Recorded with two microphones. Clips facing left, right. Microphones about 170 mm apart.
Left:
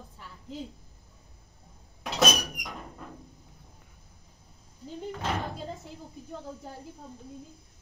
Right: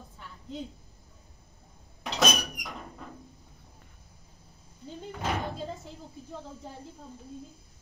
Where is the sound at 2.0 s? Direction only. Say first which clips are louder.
Left 1 dB; 5° left (ahead or behind).